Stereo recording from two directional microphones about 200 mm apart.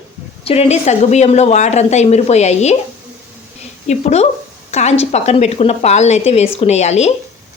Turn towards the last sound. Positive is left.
turn(degrees=35)  # may be behind; listen again after turning